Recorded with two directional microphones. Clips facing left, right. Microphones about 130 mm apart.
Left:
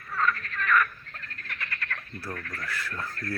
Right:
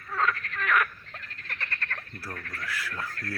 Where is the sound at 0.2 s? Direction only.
85° right.